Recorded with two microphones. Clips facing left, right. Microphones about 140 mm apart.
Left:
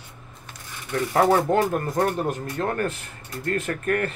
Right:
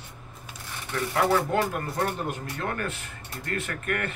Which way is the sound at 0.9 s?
35° left (ahead or behind).